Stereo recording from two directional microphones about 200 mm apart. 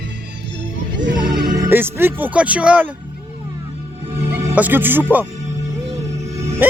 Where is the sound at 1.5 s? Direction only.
15° right (ahead or behind).